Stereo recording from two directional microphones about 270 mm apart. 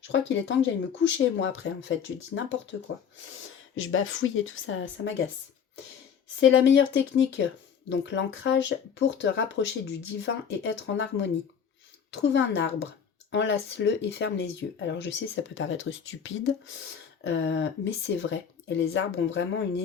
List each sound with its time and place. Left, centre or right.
0.1 s speech: left
3.8 s speech: left
6.4 s speech: left